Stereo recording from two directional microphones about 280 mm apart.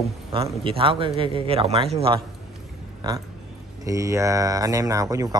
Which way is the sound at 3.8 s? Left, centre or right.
Centre.